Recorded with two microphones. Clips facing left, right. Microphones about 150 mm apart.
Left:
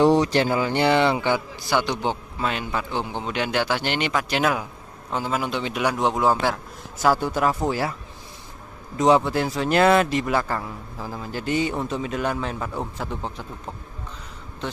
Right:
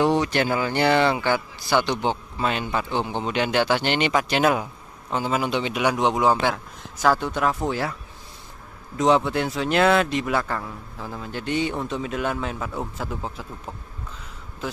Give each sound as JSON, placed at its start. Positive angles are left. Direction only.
{"t": 0.2, "sound": "speech", "side_deg": 30}
{"t": 1.7, "sound": "speech", "side_deg": 10}
{"t": 8.9, "sound": "speech", "side_deg": 0}